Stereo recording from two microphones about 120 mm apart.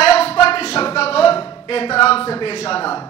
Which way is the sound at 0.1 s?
55° left (ahead or behind).